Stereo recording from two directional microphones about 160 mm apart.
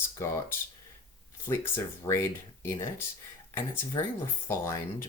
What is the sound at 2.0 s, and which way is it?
Speech, 15° left (ahead or behind).